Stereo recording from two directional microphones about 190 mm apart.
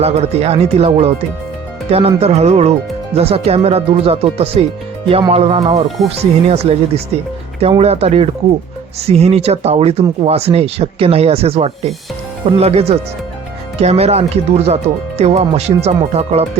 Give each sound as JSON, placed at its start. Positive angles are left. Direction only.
{"t": 0.0, "sound": "speech", "side_deg": -35}